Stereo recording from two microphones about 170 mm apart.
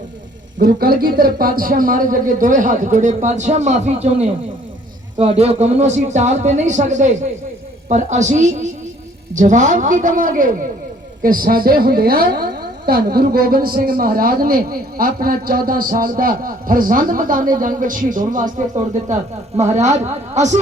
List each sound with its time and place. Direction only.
0.6 s a woman's voice: 60° right (ahead or behind); by 20.6 s 45° right (ahead or behind)